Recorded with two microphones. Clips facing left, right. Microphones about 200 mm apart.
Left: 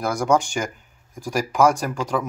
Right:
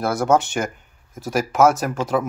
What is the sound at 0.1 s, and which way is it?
Speech, 5° right (ahead or behind).